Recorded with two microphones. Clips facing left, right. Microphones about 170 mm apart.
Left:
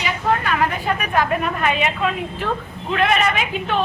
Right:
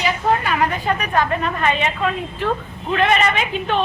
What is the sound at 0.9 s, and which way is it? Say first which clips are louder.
Speech: even; 10° left (ahead or behind).